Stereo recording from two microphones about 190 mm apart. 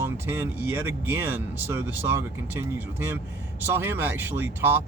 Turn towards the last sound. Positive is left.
turn(degrees=-10)  # may be behind; listen again after turning